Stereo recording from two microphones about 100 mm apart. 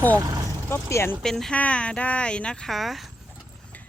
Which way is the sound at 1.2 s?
5° left (ahead or behind).